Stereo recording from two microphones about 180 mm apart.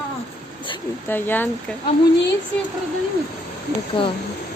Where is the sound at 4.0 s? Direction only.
30° left (ahead or behind).